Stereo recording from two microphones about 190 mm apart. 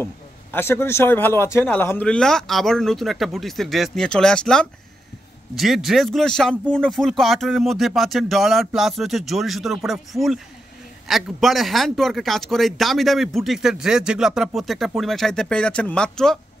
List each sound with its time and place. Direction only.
0.0 s a man's voice: 10° left (ahead or behind)